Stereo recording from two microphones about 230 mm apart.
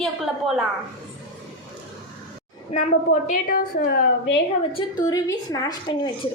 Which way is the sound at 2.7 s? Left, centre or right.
Left.